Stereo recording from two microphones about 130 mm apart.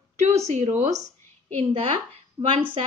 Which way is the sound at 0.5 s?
65° right (ahead or behind).